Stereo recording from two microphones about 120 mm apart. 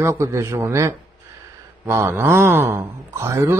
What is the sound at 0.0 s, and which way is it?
A man's voice, 25° right (ahead or behind).